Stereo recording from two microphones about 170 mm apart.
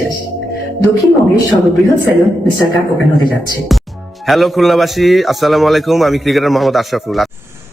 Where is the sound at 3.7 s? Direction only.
Centre (ahead or behind).